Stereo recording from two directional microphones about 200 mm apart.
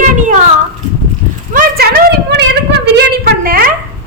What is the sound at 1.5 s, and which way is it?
A woman's voice, 45° right (ahead or behind).